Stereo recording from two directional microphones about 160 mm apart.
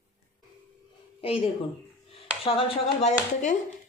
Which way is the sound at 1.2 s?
40° left (ahead or behind).